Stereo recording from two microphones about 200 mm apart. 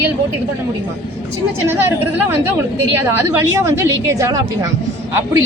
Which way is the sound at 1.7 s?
10° right (ahead or behind).